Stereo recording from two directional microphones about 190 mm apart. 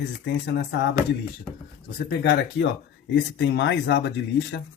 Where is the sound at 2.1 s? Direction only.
65° left (ahead or behind).